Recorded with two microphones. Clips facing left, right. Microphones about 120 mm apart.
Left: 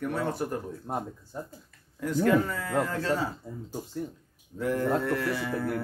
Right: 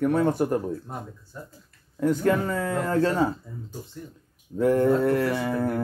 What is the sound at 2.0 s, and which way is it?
A man's voice, 45° right (ahead or behind).